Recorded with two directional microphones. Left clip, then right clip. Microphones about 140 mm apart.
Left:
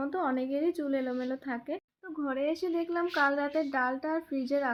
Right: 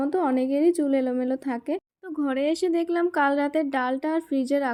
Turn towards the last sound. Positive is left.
turn(degrees=-50)  # may be behind; listen again after turning